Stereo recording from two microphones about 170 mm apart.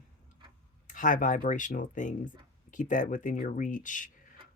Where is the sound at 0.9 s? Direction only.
50° left (ahead or behind).